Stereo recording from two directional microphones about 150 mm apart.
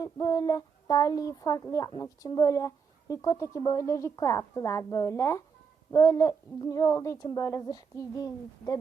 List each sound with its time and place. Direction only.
0.0 s speech: 25° left (ahead or behind)